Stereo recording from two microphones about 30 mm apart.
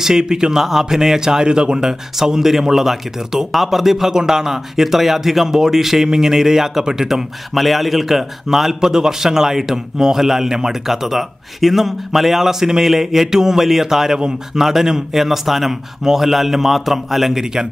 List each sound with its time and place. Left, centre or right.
0.0 s a man's voice: right
0.6 s speech: centre
4.1 s a man's voice: centre
7.5 s a man's voice: centre